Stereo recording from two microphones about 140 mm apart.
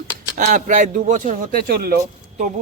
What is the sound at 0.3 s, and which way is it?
Speech, 65° right (ahead or behind).